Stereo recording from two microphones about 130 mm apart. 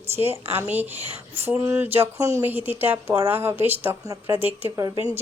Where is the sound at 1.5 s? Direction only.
15° right (ahead or behind).